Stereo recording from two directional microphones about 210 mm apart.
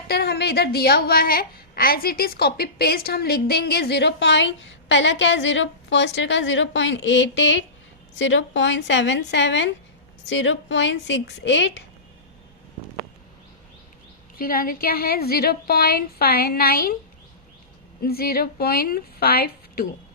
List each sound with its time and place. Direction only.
0.1 s a woman's voice: 50° left (ahead or behind)
14.3 s a woman's voice: 45° left (ahead or behind)
18.0 s a woman's voice: 45° left (ahead or behind)